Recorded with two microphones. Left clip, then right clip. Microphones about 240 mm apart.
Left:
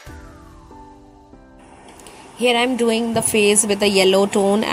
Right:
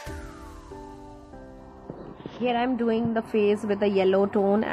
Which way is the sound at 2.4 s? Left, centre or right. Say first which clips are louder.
Left 9 dB; left.